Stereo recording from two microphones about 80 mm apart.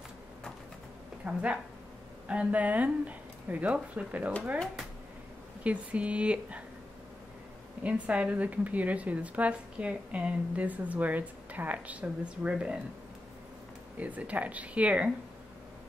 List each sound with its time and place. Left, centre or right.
1.2 s a woman's voice: centre
5.6 s a woman's voice: centre
7.8 s a woman's voice: centre
13.9 s a woman's voice: centre